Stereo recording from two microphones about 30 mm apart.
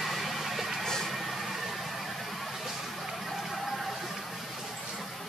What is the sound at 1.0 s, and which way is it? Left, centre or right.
Vehicle, centre.